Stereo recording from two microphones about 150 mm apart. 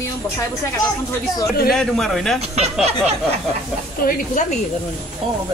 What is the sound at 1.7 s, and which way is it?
Speech, centre (ahead or behind).